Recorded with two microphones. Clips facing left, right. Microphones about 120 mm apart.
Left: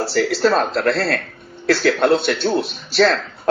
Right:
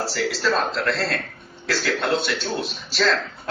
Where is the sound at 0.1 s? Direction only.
45° left (ahead or behind).